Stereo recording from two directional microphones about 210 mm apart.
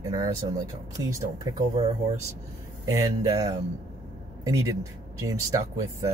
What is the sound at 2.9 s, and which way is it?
Speech, 15° right (ahead or behind).